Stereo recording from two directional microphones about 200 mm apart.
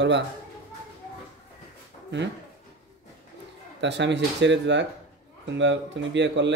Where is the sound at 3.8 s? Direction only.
60° right (ahead or behind).